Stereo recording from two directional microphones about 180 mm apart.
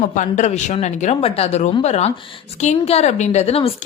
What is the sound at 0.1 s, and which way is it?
A woman's voice, 45° left (ahead or behind).